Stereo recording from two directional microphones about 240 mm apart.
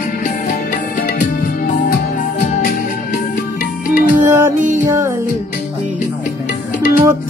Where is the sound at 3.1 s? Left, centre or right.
Left.